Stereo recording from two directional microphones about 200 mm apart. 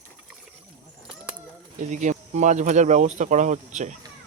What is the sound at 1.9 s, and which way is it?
Speech, 35° right (ahead or behind).